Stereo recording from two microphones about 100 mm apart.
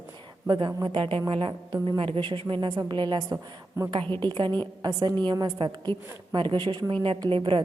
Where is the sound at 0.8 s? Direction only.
60° right (ahead or behind).